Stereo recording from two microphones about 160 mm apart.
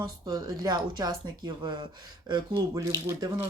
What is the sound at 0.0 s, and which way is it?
Speech, 25° right (ahead or behind).